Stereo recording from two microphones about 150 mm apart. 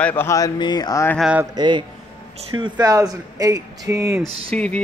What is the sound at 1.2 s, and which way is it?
Speech, 5° right (ahead or behind).